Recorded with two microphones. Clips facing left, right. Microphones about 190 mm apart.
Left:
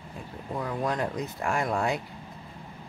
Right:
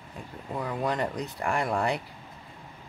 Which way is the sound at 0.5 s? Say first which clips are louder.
Even; centre (ahead or behind).